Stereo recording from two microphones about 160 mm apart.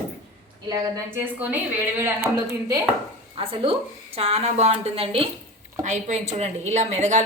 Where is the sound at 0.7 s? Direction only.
20° right (ahead or behind).